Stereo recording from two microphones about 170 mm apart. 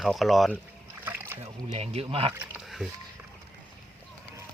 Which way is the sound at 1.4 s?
40° right (ahead or behind).